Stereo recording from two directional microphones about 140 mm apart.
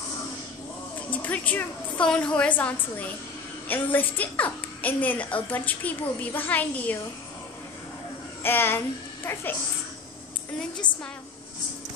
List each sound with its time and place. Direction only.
1.1 s a woman's voice: 10° left (ahead or behind)
8.4 s a child's voice: 15° left (ahead or behind)